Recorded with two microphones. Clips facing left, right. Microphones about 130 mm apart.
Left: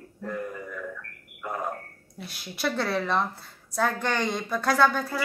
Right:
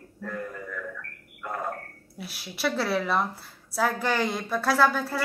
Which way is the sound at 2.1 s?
5° right (ahead or behind).